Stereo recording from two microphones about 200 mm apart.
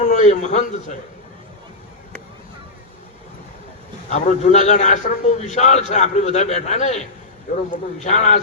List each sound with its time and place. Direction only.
0.0 s a man's voice: 35° left (ahead or behind)
4.1 s a man's voice: 35° left (ahead or behind)